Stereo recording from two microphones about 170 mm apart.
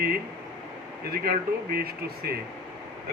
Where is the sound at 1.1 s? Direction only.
60° right (ahead or behind).